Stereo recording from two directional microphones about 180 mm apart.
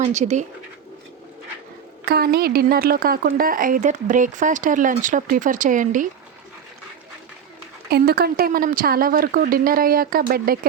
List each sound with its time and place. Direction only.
0.0 s speech: 40° right (ahead or behind)
2.0 s a woman's voice: 60° right (ahead or behind)
7.9 s a woman's voice: 60° right (ahead or behind)